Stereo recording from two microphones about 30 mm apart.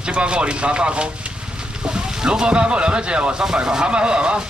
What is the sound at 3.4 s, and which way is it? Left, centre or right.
Speech, right.